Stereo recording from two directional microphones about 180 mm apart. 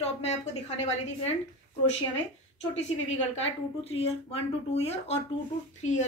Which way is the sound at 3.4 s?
35° left (ahead or behind).